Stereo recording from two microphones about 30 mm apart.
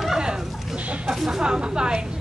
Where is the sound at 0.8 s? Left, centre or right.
Right.